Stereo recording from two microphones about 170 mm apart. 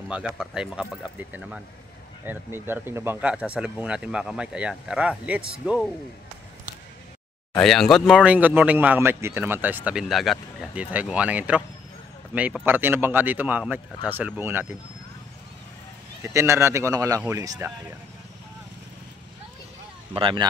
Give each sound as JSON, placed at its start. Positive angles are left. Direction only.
{"t": 0.1, "sound": "speech", "side_deg": -5}
{"t": 7.5, "sound": "speech", "side_deg": 0}
{"t": 16.3, "sound": "speech", "side_deg": -15}
{"t": 20.2, "sound": "speech", "side_deg": -30}